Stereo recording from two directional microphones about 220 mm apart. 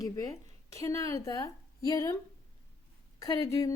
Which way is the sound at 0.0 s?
15° left (ahead or behind).